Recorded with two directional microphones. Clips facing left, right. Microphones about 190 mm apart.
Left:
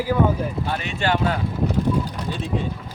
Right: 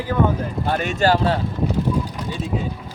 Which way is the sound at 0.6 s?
45° right (ahead or behind).